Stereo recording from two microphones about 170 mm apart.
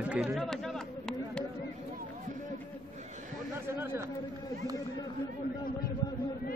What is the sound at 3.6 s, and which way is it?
Speech, 15° right (ahead or behind).